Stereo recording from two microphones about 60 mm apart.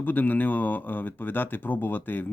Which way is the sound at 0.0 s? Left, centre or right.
Left.